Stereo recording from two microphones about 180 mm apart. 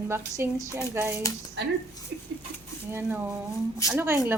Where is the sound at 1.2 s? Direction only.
15° left (ahead or behind).